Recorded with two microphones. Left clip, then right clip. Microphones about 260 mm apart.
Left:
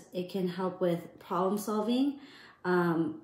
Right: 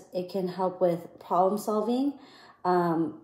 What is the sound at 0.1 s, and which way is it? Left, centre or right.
A woman's voice, centre.